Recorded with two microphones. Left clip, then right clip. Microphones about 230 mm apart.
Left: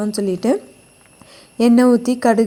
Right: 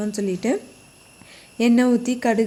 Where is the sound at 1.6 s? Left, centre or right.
Centre.